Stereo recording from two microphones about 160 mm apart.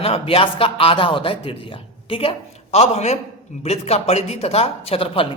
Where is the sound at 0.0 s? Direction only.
35° left (ahead or behind).